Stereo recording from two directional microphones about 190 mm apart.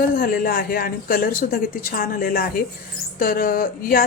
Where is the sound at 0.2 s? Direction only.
50° left (ahead or behind).